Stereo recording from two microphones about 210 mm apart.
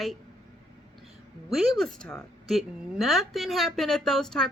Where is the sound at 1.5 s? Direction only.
Centre (ahead or behind).